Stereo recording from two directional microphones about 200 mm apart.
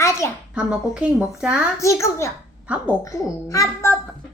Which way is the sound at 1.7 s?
15° left (ahead or behind).